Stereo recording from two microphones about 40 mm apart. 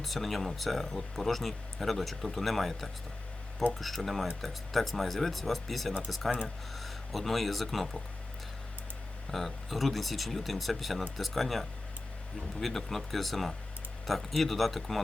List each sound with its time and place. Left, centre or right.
0.0 s speech: centre
9.3 s speech: centre